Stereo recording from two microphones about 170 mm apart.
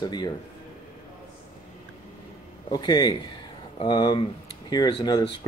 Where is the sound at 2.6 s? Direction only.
25° left (ahead or behind).